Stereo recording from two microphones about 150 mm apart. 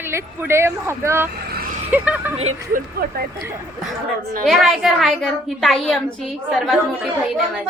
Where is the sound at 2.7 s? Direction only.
85° right.